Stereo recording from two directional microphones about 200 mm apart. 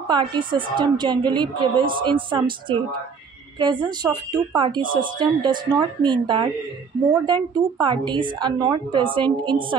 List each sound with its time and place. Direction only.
0.1 s a woman's voice: 25° right (ahead or behind)